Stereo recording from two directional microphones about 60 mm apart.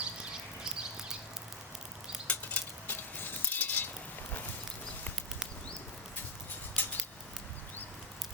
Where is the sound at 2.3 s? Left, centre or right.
Left.